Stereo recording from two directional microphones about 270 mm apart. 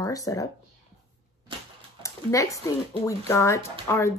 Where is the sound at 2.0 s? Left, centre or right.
Centre.